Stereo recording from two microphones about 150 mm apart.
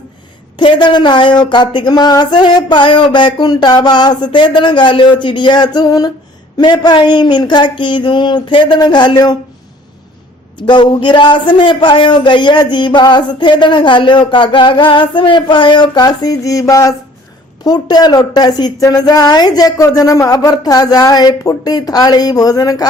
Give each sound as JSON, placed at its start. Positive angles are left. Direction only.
{"t": 0.5, "sound": "a man's voice", "side_deg": 30}
{"t": 10.7, "sound": "a man's voice", "side_deg": 30}